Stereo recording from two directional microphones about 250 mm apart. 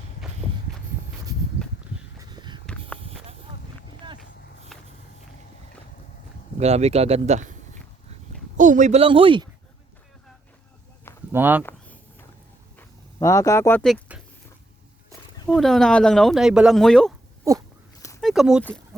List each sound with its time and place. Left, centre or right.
2.3 s a sound: centre
6.6 s speech: right
8.5 s speech: right
11.3 s speech: centre
13.1 s speech: centre
15.5 s speech: centre
18.2 s speech: centre